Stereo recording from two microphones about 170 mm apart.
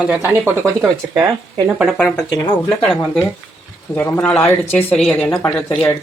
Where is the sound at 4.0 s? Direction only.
15° left (ahead or behind).